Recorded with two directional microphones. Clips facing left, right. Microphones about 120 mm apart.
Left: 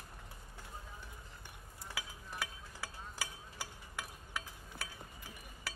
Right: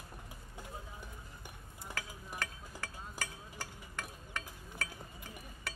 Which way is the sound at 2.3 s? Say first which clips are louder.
Right 1 dB; 10° left (ahead or behind).